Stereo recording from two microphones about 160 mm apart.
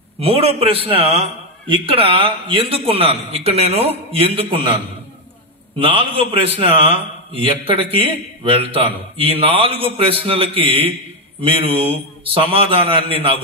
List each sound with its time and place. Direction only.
0.2 s a man's voice: 40° right (ahead or behind)